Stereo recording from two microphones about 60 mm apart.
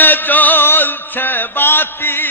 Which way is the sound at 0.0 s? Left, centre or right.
Left.